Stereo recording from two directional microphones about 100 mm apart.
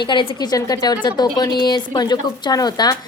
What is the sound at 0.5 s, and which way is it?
A woman's voice, 40° left (ahead or behind).